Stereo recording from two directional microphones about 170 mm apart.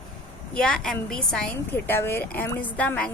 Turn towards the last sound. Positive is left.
turn(degrees=10)  # may be behind; listen again after turning